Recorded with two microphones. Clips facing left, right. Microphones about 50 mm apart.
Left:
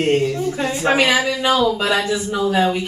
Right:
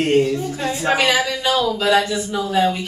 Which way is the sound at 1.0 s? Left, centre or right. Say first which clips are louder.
Left 1 dB; left.